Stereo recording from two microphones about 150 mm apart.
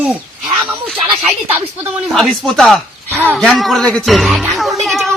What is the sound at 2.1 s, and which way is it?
Speech, centre (ahead or behind).